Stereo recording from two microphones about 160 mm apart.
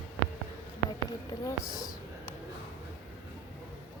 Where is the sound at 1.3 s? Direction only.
25° left (ahead or behind).